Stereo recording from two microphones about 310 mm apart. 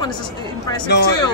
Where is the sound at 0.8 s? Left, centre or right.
Left.